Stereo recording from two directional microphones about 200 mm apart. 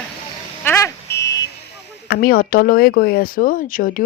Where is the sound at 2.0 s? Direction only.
50° left (ahead or behind).